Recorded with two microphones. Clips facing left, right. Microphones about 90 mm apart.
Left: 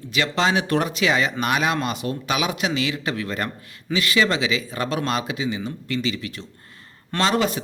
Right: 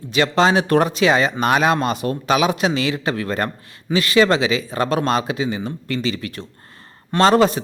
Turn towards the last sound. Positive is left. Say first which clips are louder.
# right 7 dB
turn(degrees=-35)  # may be behind; listen again after turning